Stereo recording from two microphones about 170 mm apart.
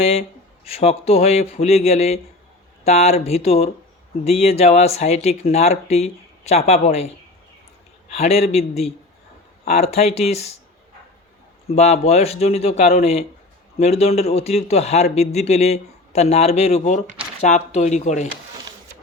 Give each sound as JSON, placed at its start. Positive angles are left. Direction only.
{"t": 0.0, "sound": "speech", "side_deg": 35}
{"t": 8.1, "sound": "speech", "side_deg": 40}
{"t": 11.7, "sound": "speech", "side_deg": 40}